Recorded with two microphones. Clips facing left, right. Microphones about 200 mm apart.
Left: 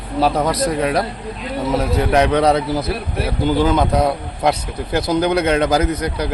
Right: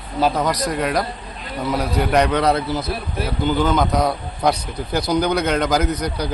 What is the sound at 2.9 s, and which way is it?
Speech, 75° left (ahead or behind).